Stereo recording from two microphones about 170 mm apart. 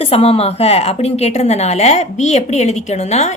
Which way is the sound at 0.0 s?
35° left (ahead or behind).